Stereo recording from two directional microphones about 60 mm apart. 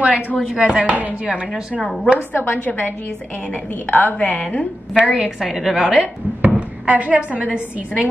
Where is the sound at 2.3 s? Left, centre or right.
Left.